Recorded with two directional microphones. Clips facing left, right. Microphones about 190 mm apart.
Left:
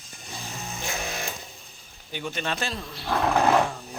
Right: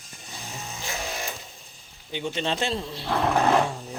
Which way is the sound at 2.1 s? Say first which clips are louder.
Right 3 dB; 20° right (ahead or behind).